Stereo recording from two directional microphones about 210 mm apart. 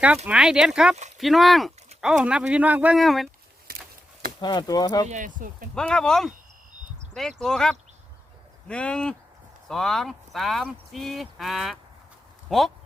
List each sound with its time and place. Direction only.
0.3 s speech: 5° right (ahead or behind)
3.7 s a sound: 45° right (ahead or behind)
4.4 s speech: 20° left (ahead or behind)
5.0 s speech: 35° right (ahead or behind)
5.7 s speech: 5° left (ahead or behind)